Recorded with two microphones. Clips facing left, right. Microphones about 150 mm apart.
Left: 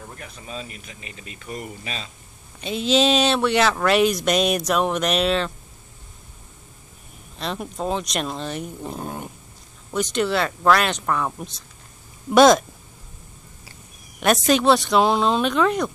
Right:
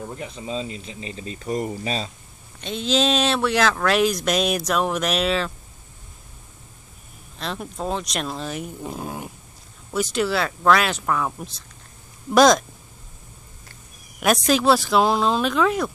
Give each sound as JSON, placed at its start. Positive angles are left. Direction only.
{"t": 0.0, "sound": "speech", "side_deg": -20}
{"t": 2.6, "sound": "speech", "side_deg": 0}
{"t": 7.3, "sound": "speech", "side_deg": 0}
{"t": 14.2, "sound": "speech", "side_deg": 0}